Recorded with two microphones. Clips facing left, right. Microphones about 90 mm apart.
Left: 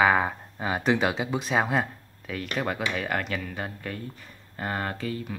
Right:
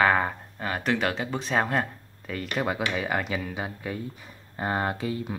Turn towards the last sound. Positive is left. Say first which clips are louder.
# right 3 dB
turn(degrees=-20)  # may be behind; listen again after turning